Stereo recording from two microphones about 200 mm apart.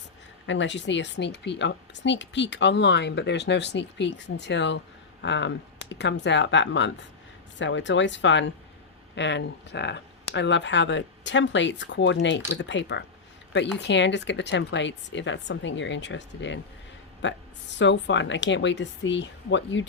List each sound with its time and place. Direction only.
0.4 s speech: 65° left (ahead or behind)